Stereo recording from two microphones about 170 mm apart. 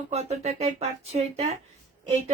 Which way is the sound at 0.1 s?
40° right (ahead or behind).